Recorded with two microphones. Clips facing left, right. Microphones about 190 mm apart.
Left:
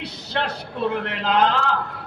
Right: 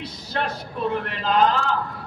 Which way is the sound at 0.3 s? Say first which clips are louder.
Left 1 dB; 75° left (ahead or behind).